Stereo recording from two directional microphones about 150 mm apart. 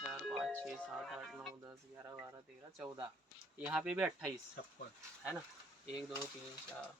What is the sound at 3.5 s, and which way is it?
Speech, 5° right (ahead or behind).